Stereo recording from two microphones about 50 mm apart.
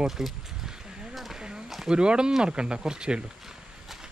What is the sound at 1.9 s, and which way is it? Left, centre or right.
Speech, centre.